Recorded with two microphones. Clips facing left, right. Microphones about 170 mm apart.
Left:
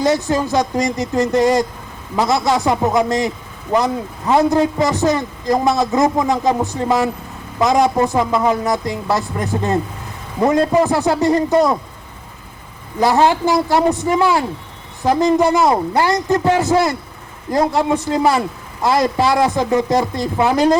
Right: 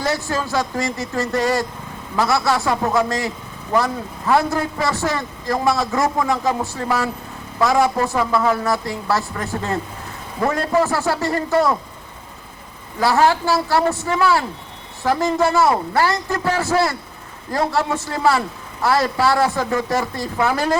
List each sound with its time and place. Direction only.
0.0 s a man's voice: 20° left (ahead or behind)
13.0 s a man's voice: 20° left (ahead or behind)